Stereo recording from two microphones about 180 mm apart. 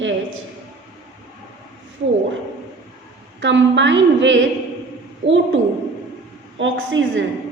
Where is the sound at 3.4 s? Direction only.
90° right.